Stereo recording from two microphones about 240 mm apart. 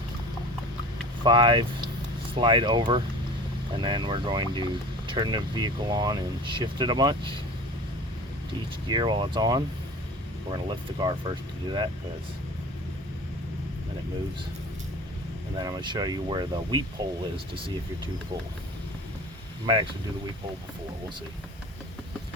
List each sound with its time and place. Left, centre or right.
1.2 s speech: centre
8.9 s speech: centre
15.5 s speech: centre